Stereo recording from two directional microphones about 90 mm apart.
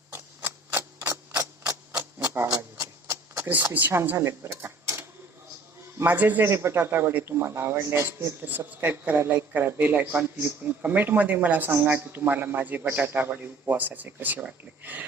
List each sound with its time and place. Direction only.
0.1 s tick-tock: 25° right (ahead or behind)
2.1 s a sound: 25° right (ahead or behind)
3.5 s speech: 20° right (ahead or behind)
6.1 s a man's voice: 20° right (ahead or behind)